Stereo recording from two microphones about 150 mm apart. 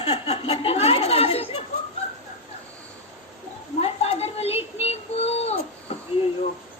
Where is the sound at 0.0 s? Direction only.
40° left (ahead or behind).